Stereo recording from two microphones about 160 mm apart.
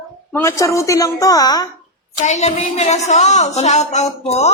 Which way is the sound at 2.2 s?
45° left (ahead or behind).